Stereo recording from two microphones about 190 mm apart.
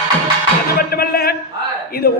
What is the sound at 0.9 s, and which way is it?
A man's voice, 55° left (ahead or behind).